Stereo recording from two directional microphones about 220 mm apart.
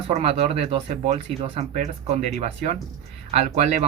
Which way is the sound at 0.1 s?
25° right (ahead or behind).